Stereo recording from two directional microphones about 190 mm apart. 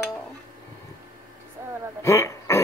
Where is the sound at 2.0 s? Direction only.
15° left (ahead or behind).